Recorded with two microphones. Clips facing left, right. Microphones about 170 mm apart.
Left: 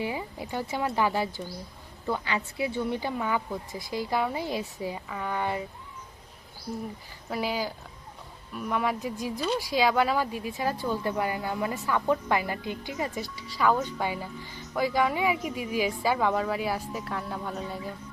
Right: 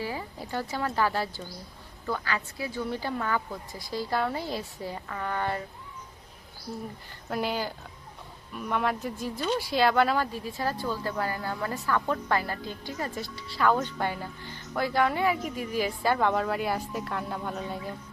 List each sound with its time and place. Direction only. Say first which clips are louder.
0.0 s speech: left 2 dB; 15° left (ahead or behind)
7.3 s speech: even; 5° left (ahead or behind)